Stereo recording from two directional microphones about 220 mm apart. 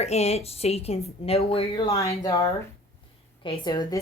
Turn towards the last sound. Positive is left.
turn(degrees=20)  # may be behind; listen again after turning